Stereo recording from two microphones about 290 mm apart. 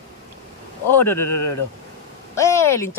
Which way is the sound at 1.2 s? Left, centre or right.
Left.